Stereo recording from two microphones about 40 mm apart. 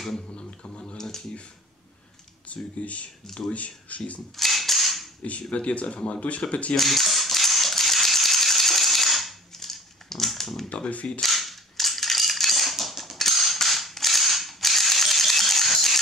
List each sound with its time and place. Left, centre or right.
0.3 s finger snapping: left
0.9 s computer keyboard: centre
2.5 s speech: left
4.4 s a sound: centre
5.2 s speech: left
6.8 s ratchet: centre
10.7 s speech: left
11.1 s cap gun: centre